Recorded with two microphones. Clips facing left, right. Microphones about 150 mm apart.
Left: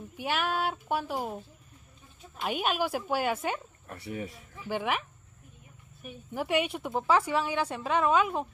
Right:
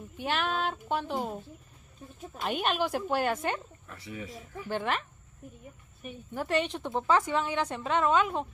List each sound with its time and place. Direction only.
0.2 s a woman's voice: 10° left (ahead or behind)
2.4 s a woman's voice: 5° left (ahead or behind)
3.9 s speech: 55° left (ahead or behind)
4.6 s a woman's voice: 10° left (ahead or behind)
6.3 s a woman's voice: 10° left (ahead or behind)